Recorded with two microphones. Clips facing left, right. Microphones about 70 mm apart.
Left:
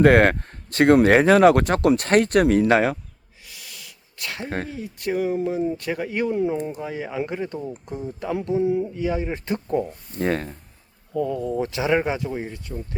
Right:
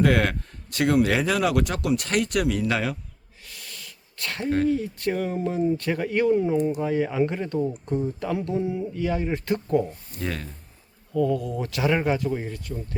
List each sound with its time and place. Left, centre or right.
0.0 s speech: left
3.4 s wheeze: centre
4.4 s speech: left
4.7 s speech: centre
10.2 s speech: left
11.1 s speech: centre